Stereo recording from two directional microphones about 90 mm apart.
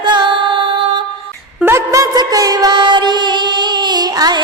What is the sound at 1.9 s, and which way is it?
Music, 45° right (ahead or behind).